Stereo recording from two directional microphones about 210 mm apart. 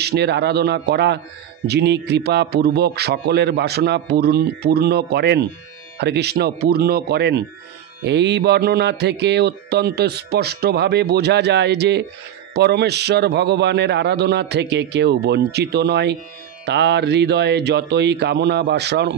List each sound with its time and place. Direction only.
0.0 s music: 50° right (ahead or behind)